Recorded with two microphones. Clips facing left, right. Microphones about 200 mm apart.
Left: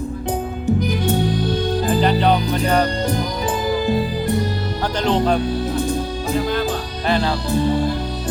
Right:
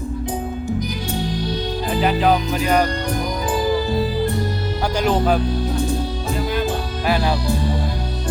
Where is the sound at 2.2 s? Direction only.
5° right (ahead or behind).